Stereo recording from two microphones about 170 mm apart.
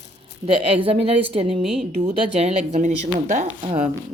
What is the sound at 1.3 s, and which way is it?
Speech, 30° right (ahead or behind).